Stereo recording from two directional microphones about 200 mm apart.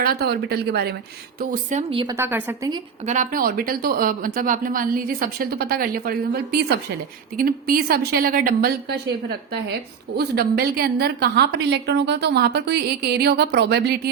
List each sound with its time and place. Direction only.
0.0 s speech: 50° right (ahead or behind)
1.9 s a woman's voice: 25° right (ahead or behind)
2.1 s a woman's voice: 10° right (ahead or behind)
3.1 s speech: 40° right (ahead or behind)
10.2 s a woman's voice: 50° right (ahead or behind)